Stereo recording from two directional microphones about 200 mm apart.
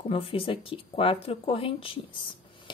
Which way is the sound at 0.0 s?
30° left (ahead or behind).